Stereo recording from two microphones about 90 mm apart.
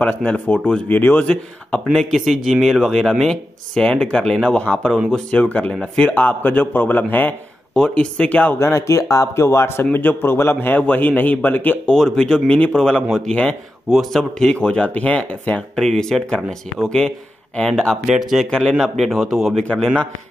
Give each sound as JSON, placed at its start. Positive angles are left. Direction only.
{"t": 0.0, "sound": "a man's voice", "side_deg": 20}
{"t": 1.9, "sound": "a man's voice", "side_deg": 0}
{"t": 7.7, "sound": "speech", "side_deg": 10}
{"t": 8.5, "sound": "a man's voice", "side_deg": 35}
{"t": 11.9, "sound": "speech", "side_deg": 10}
{"t": 18.0, "sound": "speech", "side_deg": -5}
{"t": 19.6, "sound": "speech", "side_deg": 10}